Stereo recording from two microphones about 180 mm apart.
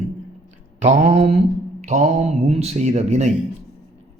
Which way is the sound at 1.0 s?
35° right (ahead or behind).